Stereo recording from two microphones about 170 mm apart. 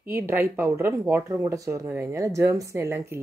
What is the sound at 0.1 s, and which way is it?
Speech, 10° right (ahead or behind).